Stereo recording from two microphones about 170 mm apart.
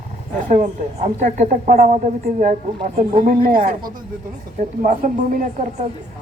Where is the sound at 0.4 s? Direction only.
45° right (ahead or behind).